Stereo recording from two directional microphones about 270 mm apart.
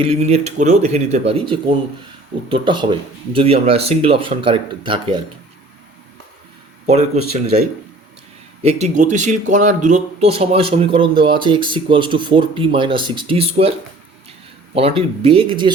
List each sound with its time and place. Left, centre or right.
0.0 s speech: right
6.8 s speech: right
8.6 s speech: right
14.8 s speech: right